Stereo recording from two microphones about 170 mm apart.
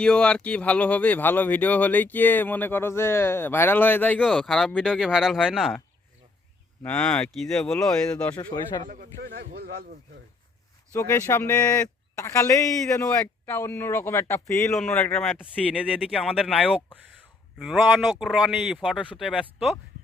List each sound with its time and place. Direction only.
0.0 s speech: 5° left (ahead or behind)
6.8 s speech: 5° left (ahead or behind)
9.2 s speech: 70° right (ahead or behind)
10.9 s speech: 15° left (ahead or behind)
14.7 s speech: centre (ahead or behind)
15.8 s speech: 5° right (ahead or behind)
16.2 s speech: 5° left (ahead or behind)